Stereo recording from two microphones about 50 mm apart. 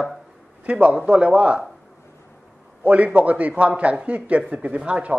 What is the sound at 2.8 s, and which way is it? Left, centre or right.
A man's voice, right.